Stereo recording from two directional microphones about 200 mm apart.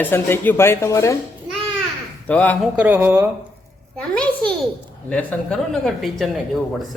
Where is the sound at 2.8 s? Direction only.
10° right (ahead or behind).